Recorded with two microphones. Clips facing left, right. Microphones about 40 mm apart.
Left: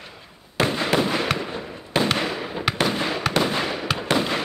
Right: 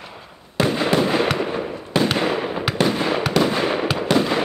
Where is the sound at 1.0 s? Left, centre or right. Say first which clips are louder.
Right 4 dB; right.